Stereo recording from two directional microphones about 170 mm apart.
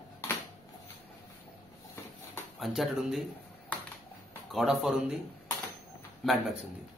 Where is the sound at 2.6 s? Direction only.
Centre (ahead or behind).